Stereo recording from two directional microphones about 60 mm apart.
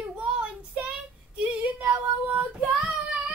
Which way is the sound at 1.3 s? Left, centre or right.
Right.